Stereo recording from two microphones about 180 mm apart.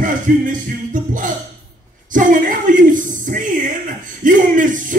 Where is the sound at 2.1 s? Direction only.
50° right (ahead or behind).